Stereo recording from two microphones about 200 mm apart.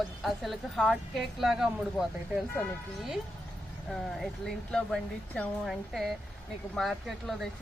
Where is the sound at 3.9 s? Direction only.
Centre (ahead or behind).